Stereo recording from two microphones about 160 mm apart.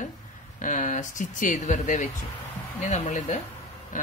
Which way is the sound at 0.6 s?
50° left (ahead or behind).